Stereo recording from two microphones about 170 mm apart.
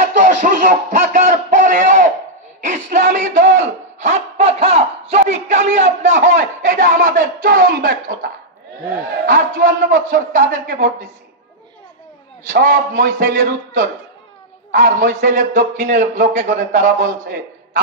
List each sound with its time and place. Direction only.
0.0 s a sound: 50° right (ahead or behind)
2.6 s a man's voice: 50° right (ahead or behind)
12.4 s a man's voice: 55° right (ahead or behind)